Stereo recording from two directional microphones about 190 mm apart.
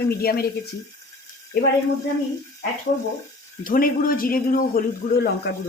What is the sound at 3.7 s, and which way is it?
Speech, 45° left (ahead or behind).